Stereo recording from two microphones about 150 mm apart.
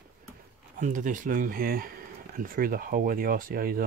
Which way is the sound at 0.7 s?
60° right (ahead or behind).